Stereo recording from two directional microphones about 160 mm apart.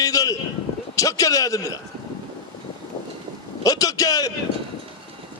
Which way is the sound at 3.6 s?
20° left (ahead or behind).